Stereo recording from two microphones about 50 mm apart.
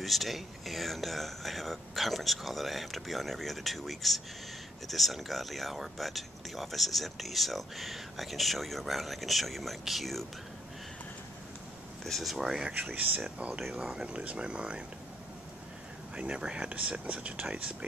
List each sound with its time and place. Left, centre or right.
0.0 s speech: centre
12.0 s speech: centre
12.4 s speech: centre
12.8 s speech: right
13.6 s speech: centre
14.0 s speech: right
16.2 s speech: centre